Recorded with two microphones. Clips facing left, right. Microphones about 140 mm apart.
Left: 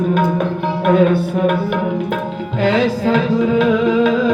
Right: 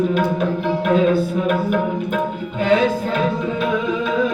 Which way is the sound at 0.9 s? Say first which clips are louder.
Left 3 dB; 60° left (ahead or behind).